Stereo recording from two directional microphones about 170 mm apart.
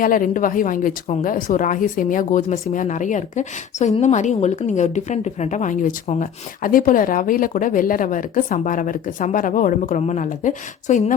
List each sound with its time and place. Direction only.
0.0 s a woman's voice: 55° left (ahead or behind)